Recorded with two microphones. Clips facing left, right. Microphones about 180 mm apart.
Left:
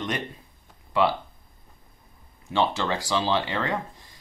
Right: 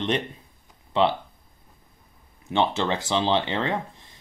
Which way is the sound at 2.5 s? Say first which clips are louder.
Right 1 dB; 20° right (ahead or behind).